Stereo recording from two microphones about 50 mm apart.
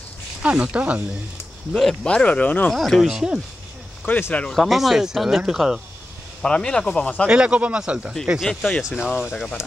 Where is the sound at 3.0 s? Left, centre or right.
Centre.